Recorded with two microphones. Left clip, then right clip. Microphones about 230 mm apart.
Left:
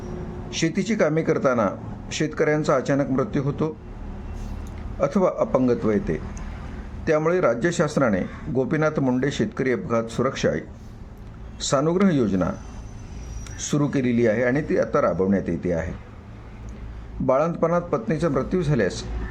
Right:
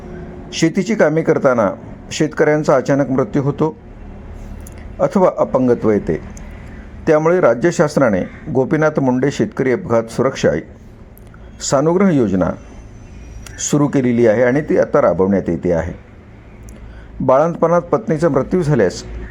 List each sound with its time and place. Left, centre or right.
0.5 s speech: centre
4.9 s a man's voice: centre
11.6 s speech: centre
13.7 s a man's voice: centre
17.2 s a man's voice: centre